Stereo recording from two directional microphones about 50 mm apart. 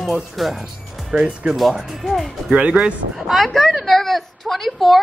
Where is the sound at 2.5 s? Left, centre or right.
Centre.